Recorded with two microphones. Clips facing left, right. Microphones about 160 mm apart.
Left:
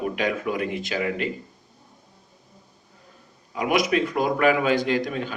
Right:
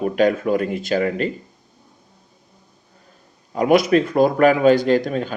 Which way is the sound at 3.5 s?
40° right (ahead or behind).